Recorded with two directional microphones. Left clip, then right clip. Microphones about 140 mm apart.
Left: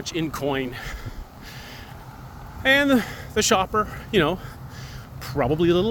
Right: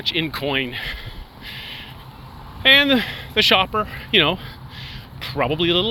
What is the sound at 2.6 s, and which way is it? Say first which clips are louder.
Speech: right 5 dB; 50° left (ahead or behind).